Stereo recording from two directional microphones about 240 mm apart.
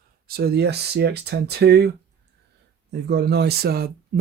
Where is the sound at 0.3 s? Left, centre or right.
Right.